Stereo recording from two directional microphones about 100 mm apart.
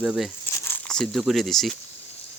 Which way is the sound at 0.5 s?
20° left (ahead or behind).